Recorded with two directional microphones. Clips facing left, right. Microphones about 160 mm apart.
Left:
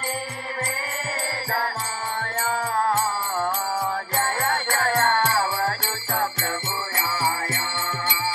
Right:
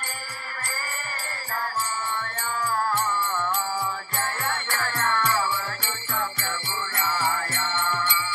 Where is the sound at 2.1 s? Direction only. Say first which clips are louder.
Left 5 dB; 50° left (ahead or behind).